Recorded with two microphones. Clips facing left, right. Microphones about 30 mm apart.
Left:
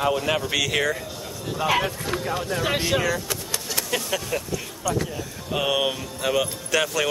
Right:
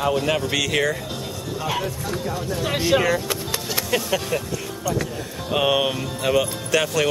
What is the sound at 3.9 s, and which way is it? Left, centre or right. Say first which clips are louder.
Speech: right 4 dB; centre.